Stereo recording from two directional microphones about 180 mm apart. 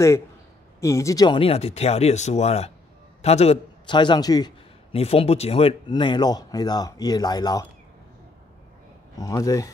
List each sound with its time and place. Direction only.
0.7 s a man's voice: 15° left (ahead or behind)
4.9 s speech: 35° left (ahead or behind)
9.2 s speech: 20° left (ahead or behind)